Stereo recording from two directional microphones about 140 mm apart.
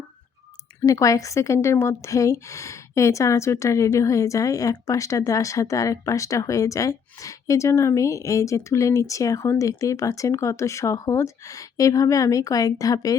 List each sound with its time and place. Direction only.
0.9 s speech: 25° left (ahead or behind)